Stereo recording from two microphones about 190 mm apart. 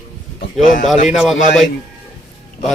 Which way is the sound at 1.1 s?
Centre (ahead or behind).